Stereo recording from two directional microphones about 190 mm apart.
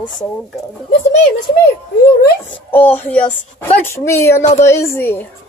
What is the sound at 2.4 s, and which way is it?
Speech, 10° left (ahead or behind).